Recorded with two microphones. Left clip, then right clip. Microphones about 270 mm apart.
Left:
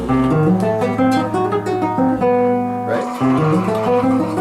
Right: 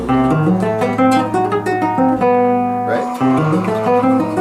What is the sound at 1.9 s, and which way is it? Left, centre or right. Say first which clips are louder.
Music: right 2 dB; centre.